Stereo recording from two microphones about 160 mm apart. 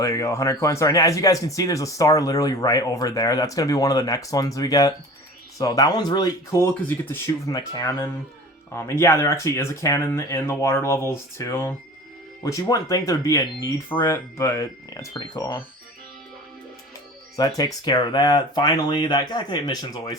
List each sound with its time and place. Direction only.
0.0 s speech: 20° left (ahead or behind)
17.3 s speech: 25° left (ahead or behind)